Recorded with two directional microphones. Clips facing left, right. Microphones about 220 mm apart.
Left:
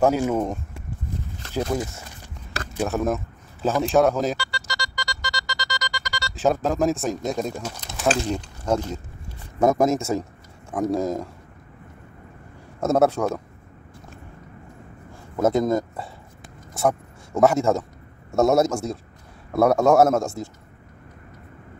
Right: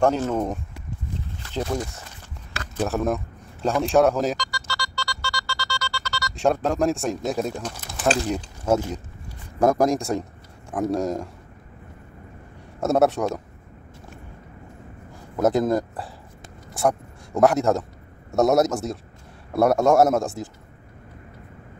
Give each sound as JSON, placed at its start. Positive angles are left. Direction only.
{"t": 0.0, "sound": "speech", "side_deg": 10}
{"t": 4.5, "sound": "music", "side_deg": 20}
{"t": 6.3, "sound": "speech", "side_deg": 0}
{"t": 12.8, "sound": "speech", "side_deg": 0}
{"t": 15.3, "sound": "speech", "side_deg": 0}